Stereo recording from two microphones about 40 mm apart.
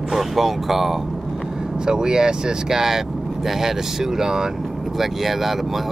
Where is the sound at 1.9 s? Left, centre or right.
Centre.